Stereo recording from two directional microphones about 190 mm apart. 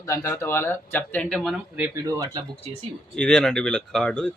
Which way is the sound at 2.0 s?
20° right (ahead or behind).